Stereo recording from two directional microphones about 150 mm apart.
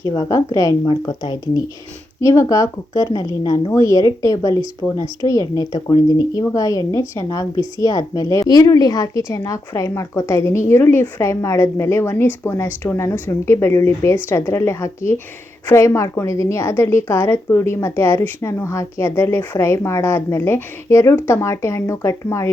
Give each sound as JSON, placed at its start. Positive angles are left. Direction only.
{"t": 0.0, "sound": "a woman's voice", "side_deg": 25}